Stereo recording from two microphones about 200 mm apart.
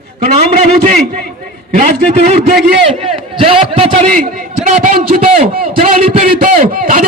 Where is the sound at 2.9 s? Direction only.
30° right (ahead or behind).